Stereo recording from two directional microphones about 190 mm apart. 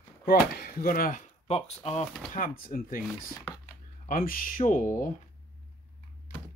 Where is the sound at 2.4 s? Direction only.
50° left (ahead or behind).